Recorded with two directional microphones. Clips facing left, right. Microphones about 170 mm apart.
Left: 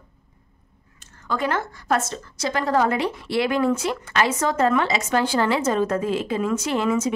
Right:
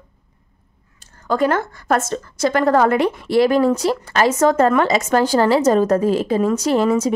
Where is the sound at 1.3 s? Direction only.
45° right (ahead or behind).